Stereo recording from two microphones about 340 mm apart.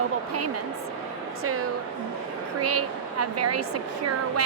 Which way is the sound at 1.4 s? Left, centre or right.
Right.